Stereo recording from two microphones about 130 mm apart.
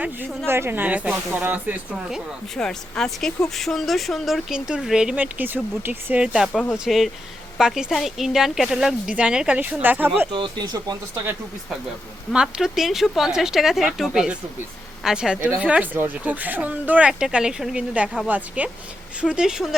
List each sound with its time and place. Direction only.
0.0 s speech: 15° right (ahead or behind)
2.6 s speech: 5° left (ahead or behind); by 10.1 s 15° right (ahead or behind)
10.3 s speech: 35° right (ahead or behind)
12.3 s speech: 5° right (ahead or behind)